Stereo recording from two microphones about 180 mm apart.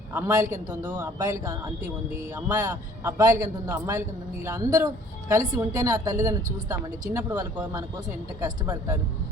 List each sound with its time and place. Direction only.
0.1 s a man's voice: 15° right (ahead or behind)